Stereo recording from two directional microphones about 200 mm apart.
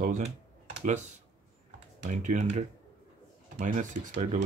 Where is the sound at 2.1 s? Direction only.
40° right (ahead or behind).